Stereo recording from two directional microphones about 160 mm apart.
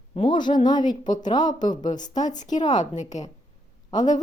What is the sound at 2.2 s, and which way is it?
A woman's voice, 50° left (ahead or behind).